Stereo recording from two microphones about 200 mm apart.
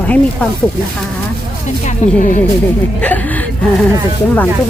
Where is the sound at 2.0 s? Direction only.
35° left (ahead or behind).